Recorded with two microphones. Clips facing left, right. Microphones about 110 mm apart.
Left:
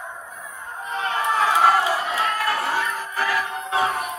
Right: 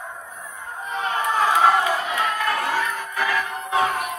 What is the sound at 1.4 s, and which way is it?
Crowd, centre (ahead or behind).